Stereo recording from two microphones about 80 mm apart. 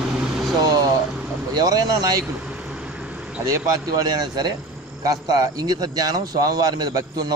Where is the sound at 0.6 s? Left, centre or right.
Right.